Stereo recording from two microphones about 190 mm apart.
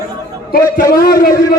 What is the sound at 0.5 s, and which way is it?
Speech, 50° left (ahead or behind).